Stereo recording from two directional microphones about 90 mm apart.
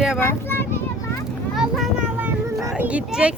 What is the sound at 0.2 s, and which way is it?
Speech, 25° left (ahead or behind).